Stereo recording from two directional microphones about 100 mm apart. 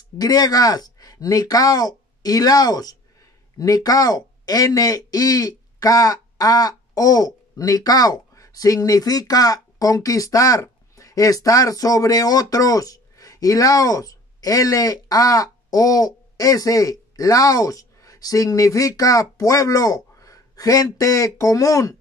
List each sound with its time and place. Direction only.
0.2 s speech: 40° left (ahead or behind)